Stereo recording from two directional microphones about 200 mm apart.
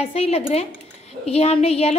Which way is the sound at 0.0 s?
30° left (ahead or behind).